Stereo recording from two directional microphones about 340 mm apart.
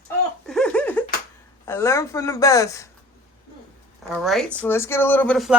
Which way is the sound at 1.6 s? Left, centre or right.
Centre.